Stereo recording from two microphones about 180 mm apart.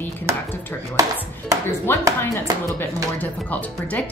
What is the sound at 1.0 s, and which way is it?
Chopping, 20° right (ahead or behind).